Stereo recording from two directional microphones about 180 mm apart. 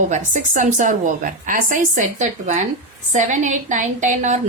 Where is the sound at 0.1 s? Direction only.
45° right (ahead or behind).